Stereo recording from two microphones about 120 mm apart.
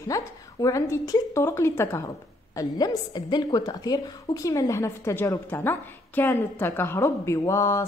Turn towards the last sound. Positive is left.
turn(degrees=25)  # may be behind; listen again after turning